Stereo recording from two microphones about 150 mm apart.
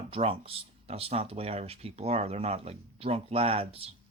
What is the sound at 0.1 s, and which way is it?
Speech, 40° right (ahead or behind).